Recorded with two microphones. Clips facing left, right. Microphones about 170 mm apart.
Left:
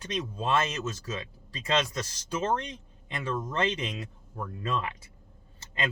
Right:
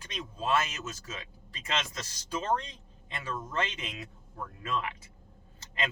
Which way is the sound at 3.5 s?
30° left (ahead or behind).